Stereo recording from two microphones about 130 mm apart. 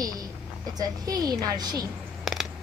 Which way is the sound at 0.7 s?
30° right (ahead or behind).